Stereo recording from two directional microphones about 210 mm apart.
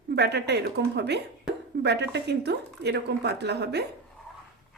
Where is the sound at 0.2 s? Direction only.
55° right (ahead or behind).